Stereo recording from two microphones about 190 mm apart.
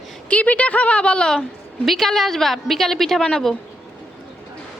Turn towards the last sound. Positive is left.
turn(degrees=5)  # may be behind; listen again after turning